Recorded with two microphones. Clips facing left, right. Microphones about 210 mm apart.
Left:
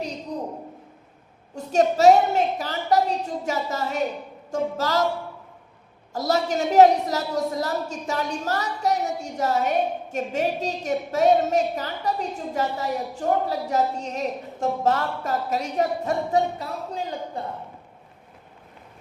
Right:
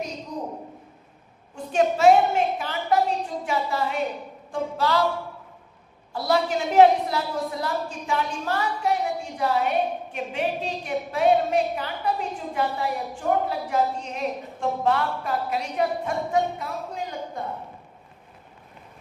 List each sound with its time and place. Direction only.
0.3 s a sound: 35° left (ahead or behind)
1.5 s a woman's voice: 40° left (ahead or behind)
6.1 s a woman's voice: 40° left (ahead or behind)